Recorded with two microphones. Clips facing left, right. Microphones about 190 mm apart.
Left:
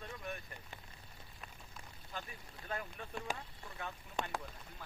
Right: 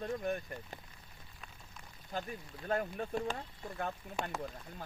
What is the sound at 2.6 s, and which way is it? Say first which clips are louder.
Speech: right 9 dB; 45° right (ahead or behind).